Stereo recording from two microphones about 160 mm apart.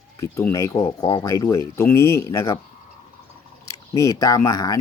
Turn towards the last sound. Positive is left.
turn(degrees=20)  # may be behind; listen again after turning